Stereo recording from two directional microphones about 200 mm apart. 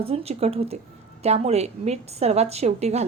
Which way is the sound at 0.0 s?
30° right (ahead or behind).